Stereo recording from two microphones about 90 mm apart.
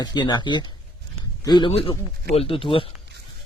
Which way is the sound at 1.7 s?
90° left.